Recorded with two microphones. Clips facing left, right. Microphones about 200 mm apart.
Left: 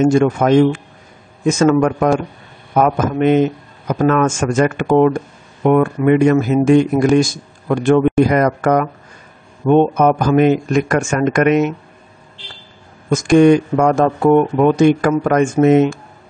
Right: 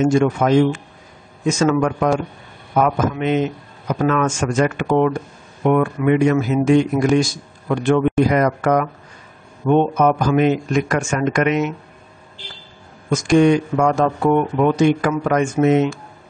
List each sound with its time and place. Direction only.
0.0 s a man's voice: 45° left (ahead or behind)
13.1 s speech: 50° left (ahead or behind)